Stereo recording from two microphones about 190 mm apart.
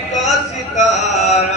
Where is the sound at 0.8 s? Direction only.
40° left (ahead or behind).